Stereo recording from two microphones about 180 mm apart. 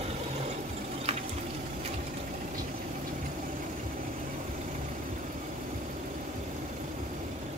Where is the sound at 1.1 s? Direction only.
35° right (ahead or behind).